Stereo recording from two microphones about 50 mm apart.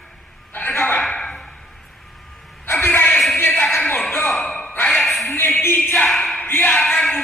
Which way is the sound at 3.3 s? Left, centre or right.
Left.